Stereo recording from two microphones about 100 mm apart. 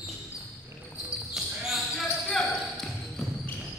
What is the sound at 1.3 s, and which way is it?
Basketball bounce, centre (ahead or behind).